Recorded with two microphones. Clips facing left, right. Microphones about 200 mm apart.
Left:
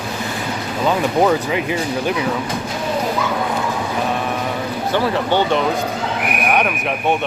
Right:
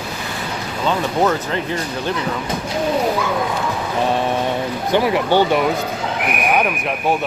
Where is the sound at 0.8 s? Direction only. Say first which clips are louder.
Left 2 dB; 10° left (ahead or behind).